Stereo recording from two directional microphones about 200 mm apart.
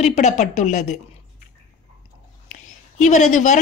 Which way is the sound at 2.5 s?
40° left (ahead or behind).